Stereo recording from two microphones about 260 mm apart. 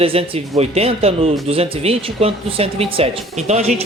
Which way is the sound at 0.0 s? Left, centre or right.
Right.